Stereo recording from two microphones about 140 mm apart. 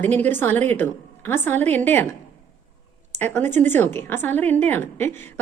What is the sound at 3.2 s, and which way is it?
A woman's voice, 15° left (ahead or behind).